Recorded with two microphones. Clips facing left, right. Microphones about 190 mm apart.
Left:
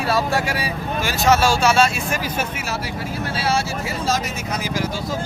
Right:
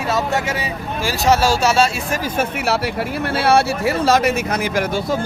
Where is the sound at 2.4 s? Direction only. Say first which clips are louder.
Right 6 dB; 65° right (ahead or behind).